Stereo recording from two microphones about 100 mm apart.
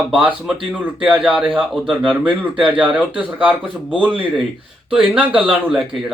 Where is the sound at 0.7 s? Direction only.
15° right (ahead or behind).